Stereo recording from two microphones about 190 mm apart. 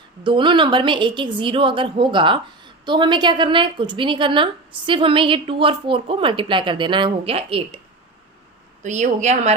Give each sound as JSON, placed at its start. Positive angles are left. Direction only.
{"t": 0.2, "sound": "a woman's voice", "side_deg": -25}
{"t": 8.8, "sound": "speech", "side_deg": -40}